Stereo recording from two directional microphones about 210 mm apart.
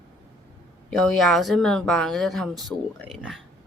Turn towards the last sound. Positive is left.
turn(degrees=0)  # may be behind; listen again after turning